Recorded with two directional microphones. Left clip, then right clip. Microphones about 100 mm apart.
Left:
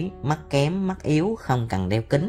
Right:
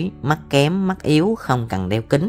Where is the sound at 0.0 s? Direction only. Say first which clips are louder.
Right 6 dB; 40° right (ahead or behind); by 2.1 s 25° right (ahead or behind).